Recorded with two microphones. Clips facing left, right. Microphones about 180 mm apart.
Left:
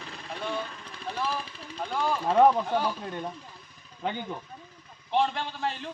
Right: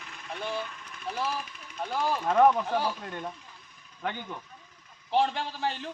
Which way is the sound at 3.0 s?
15° left (ahead or behind).